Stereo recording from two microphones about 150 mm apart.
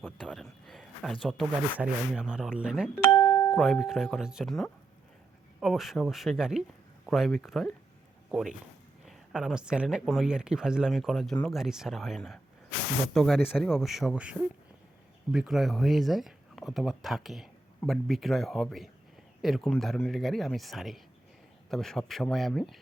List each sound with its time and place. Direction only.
0.0 s a man's voice: centre (ahead or behind)
3.0 s speech: 25° left (ahead or behind)
3.2 s music: 15° left (ahead or behind)
3.6 s speech: centre (ahead or behind)